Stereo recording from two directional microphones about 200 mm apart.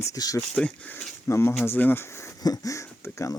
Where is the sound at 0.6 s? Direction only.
5° left (ahead or behind).